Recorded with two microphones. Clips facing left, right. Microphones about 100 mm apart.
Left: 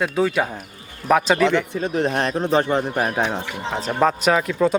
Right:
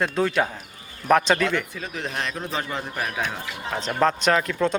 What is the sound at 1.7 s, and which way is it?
Speech, 35° left (ahead or behind).